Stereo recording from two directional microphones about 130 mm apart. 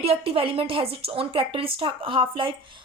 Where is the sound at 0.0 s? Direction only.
45° right (ahead or behind).